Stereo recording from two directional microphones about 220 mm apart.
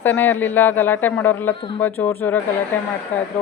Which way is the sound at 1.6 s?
25° left (ahead or behind).